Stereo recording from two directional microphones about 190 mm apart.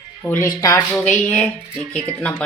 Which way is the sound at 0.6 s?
20° left (ahead or behind).